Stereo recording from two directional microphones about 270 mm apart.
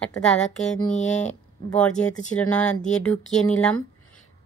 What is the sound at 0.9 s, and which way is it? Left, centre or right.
Speech, left.